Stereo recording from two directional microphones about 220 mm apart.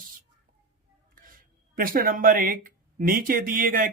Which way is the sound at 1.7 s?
40° right (ahead or behind).